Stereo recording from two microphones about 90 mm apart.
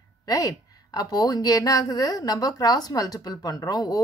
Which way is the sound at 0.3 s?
45° left (ahead or behind).